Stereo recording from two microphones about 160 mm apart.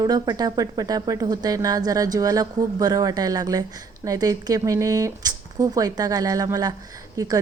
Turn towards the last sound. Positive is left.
turn(degrees=-20)  # may be behind; listen again after turning